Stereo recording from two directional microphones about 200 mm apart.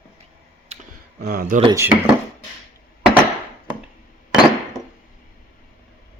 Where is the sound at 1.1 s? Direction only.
45° right (ahead or behind).